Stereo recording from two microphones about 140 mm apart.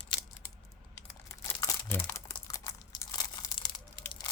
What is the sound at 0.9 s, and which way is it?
Crumpling, 20° left (ahead or behind).